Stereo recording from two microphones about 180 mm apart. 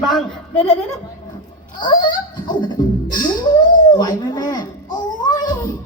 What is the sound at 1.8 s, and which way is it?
Speech, 25° left (ahead or behind).